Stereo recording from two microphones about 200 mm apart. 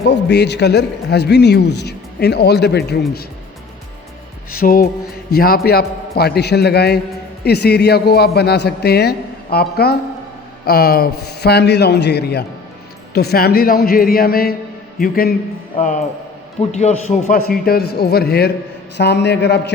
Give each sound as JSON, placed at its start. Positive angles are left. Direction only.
{"t": 0.1, "sound": "a man's voice", "side_deg": 55}
{"t": 4.5, "sound": "a man's voice", "side_deg": 45}
{"t": 16.6, "sound": "a man's voice", "side_deg": 35}
{"t": 17.3, "sound": "a man's voice", "side_deg": 50}